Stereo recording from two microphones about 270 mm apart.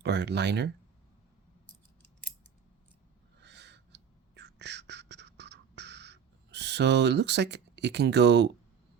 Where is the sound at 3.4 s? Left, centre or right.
Right.